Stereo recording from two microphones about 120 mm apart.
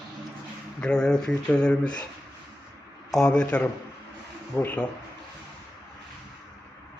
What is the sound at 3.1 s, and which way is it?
Speech, 5° left (ahead or behind).